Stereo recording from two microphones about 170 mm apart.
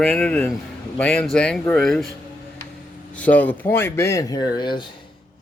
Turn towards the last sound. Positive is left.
turn(degrees=25)  # may be behind; listen again after turning